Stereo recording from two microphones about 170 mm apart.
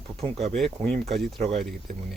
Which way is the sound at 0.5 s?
5° left (ahead or behind).